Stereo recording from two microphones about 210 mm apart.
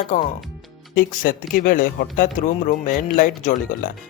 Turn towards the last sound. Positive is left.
turn(degrees=40)  # may be behind; listen again after turning